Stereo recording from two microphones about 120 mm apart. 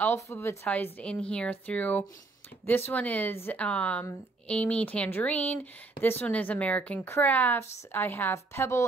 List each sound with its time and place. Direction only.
0.0 s speech: 20° left (ahead or behind)